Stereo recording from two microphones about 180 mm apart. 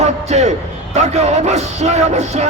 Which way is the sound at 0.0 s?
40° right (ahead or behind).